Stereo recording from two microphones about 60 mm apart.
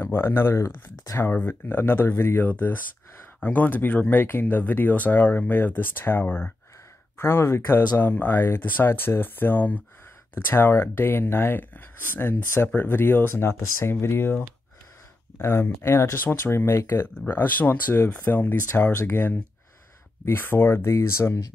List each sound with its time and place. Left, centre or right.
0.0 s speech: left
10.3 s speech: left
15.3 s speech: left
16.2 s speech: left
18.9 s speech: left
20.2 s speech: left